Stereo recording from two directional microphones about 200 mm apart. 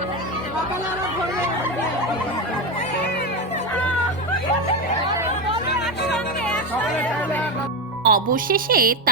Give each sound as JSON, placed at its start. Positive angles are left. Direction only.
{"t": 8.0, "sound": "a woman's voice", "side_deg": -45}